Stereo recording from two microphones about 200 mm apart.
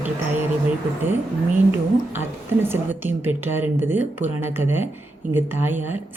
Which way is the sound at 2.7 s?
10° right (ahead or behind).